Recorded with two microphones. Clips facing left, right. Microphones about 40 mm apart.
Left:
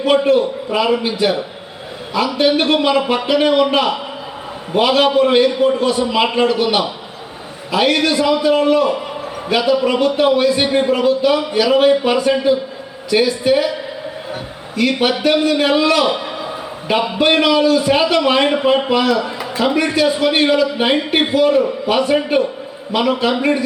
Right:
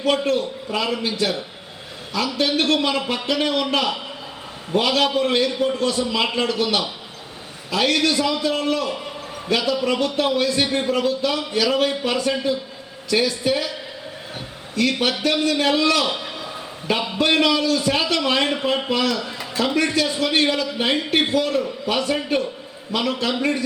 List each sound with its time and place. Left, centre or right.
0.0 s a man's voice: centre
14.8 s a man's voice: centre